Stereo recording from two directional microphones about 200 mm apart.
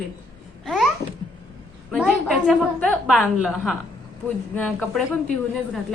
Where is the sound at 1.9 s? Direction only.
Centre (ahead or behind).